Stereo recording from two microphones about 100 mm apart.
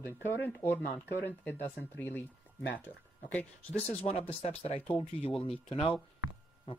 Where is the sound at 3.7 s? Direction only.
85° left.